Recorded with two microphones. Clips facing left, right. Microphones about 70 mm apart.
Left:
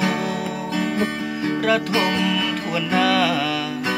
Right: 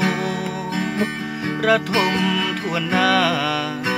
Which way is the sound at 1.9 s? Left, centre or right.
Centre.